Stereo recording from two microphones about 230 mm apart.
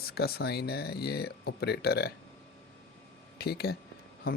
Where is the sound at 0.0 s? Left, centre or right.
Left.